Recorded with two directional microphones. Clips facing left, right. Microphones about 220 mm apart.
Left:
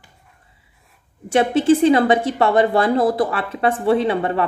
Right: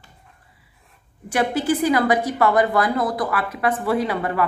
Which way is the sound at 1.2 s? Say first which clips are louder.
Left 6 dB; 25° left (ahead or behind).